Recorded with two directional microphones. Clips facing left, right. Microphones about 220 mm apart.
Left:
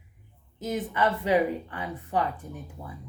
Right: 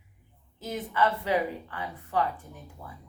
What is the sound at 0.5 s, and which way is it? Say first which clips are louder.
Speech: left 1 dB; 20° left (ahead or behind).